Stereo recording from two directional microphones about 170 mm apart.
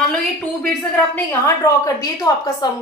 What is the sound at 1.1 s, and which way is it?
A woman's voice, 15° left (ahead or behind).